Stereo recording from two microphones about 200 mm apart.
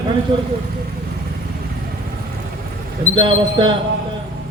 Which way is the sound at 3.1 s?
25° right (ahead or behind).